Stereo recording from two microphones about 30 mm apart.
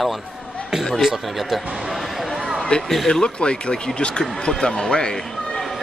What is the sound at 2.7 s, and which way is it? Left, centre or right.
Speech, left.